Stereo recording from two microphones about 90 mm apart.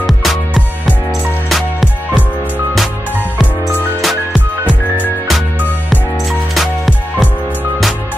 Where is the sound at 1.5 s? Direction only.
Centre (ahead or behind).